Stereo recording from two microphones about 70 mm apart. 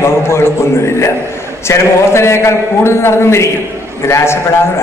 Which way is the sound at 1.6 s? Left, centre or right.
Left.